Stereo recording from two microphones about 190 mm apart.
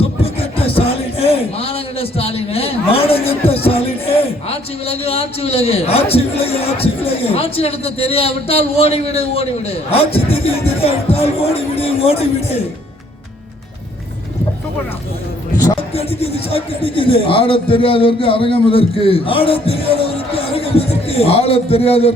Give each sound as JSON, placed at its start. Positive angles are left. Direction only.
{"t": 0.0, "sound": "music", "side_deg": 30}
{"t": 16.0, "sound": "speech", "side_deg": 30}